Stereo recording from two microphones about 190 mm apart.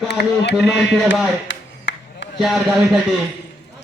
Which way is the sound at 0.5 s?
5° left (ahead or behind).